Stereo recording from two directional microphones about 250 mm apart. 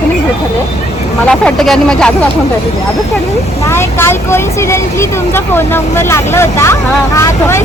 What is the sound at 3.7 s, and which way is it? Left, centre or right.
Speech, centre.